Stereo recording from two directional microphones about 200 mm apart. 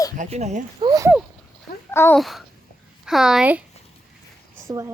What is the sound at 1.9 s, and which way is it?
Speech, 10° left (ahead or behind).